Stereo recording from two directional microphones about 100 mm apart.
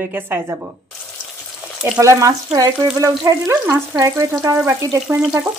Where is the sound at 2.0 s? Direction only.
35° right (ahead or behind).